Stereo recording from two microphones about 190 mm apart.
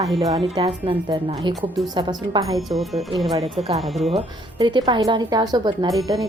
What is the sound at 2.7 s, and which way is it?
Speech, centre (ahead or behind).